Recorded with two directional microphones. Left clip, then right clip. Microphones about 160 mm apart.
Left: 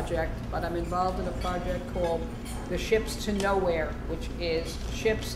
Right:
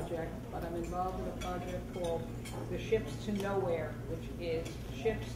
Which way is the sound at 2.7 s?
20° left (ahead or behind).